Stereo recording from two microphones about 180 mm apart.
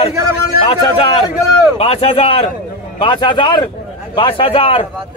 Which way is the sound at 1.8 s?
35° left (ahead or behind).